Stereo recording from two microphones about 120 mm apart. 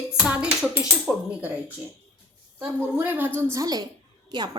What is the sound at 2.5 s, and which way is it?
Speech, 15° right (ahead or behind).